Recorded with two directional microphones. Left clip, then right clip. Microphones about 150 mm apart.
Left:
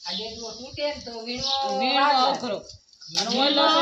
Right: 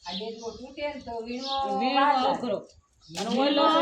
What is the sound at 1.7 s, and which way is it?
Speech, 35° right (ahead or behind).